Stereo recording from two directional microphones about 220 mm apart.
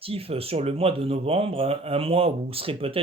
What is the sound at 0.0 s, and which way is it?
Speech, 25° right (ahead or behind).